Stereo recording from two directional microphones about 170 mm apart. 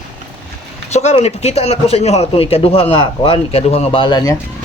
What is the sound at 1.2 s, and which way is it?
A man's voice, 40° left (ahead or behind).